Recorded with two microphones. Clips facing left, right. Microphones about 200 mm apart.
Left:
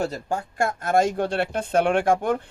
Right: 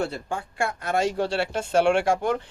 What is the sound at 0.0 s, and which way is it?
Speech, 40° left (ahead or behind).